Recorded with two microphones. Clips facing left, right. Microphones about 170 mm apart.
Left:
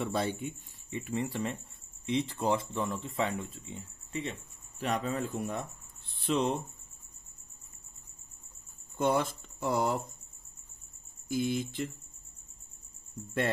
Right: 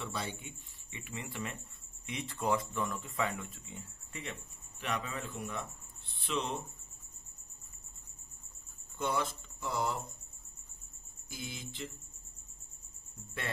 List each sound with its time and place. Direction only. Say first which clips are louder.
0.0 s speech: left 8 dB; 50° left (ahead or behind); by 4.8 s 25° left (ahead or behind)
4.8 s speech: left 6 dB; 40° left (ahead or behind)
8.9 s speech: left 6 dB; 50° left (ahead or behind)
11.2 s speech: left 14 dB; 50° left (ahead or behind)